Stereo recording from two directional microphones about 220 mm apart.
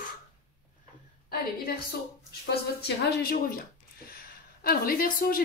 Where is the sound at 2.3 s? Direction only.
45° left (ahead or behind).